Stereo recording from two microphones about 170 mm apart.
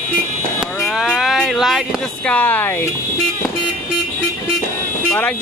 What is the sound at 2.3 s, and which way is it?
Music, 10° left (ahead or behind).